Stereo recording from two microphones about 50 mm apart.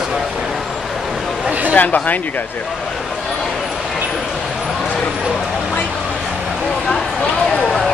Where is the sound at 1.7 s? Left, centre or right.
Left.